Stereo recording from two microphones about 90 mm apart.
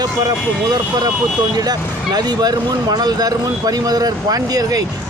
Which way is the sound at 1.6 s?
45° right (ahead or behind).